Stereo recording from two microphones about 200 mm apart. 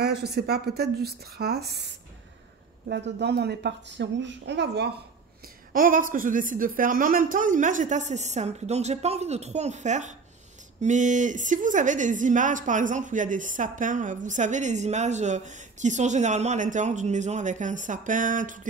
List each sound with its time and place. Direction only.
0.0 s a woman's voice: 50° right (ahead or behind)
5.7 s a woman's voice: 45° right (ahead or behind)